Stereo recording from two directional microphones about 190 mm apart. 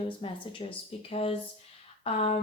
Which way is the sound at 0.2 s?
30° left (ahead or behind).